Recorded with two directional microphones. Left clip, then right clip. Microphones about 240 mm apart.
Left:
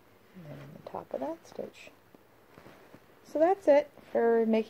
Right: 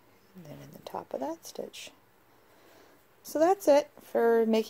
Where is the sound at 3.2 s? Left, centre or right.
Right.